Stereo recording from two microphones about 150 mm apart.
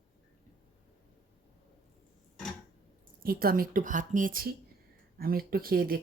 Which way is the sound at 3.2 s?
80° right.